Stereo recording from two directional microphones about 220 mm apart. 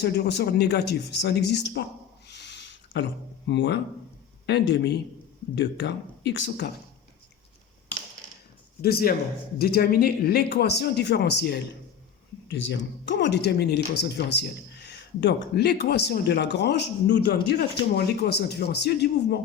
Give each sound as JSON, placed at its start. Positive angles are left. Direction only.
{"t": 0.0, "sound": "speech", "side_deg": 50}
{"t": 8.8, "sound": "speech", "side_deg": 45}